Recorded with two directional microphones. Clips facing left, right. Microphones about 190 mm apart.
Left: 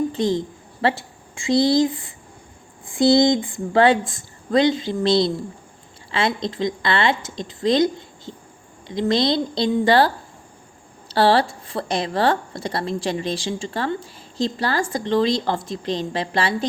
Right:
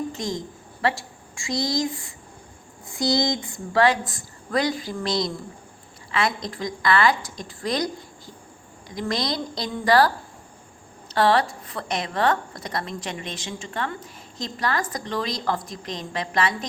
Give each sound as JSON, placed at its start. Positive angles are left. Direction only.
{"t": 0.1, "sound": "a sound", "side_deg": 30}
{"t": 1.5, "sound": "a woman's voice", "side_deg": 30}
{"t": 3.0, "sound": "a woman's voice", "side_deg": 25}
{"t": 11.1, "sound": "a woman's voice", "side_deg": 30}